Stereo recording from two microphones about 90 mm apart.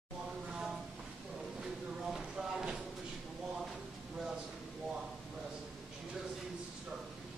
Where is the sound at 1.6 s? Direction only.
5° right (ahead or behind).